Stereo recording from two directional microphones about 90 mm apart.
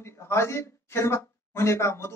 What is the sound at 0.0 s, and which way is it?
Speech, 30° left (ahead or behind).